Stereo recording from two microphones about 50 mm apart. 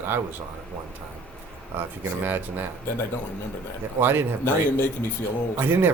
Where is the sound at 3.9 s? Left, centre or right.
Right.